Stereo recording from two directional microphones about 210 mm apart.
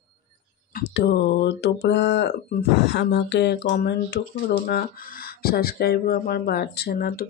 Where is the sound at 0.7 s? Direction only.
55° left (ahead or behind).